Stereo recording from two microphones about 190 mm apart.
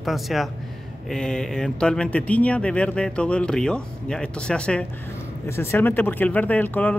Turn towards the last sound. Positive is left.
turn(degrees=5)  # may be behind; listen again after turning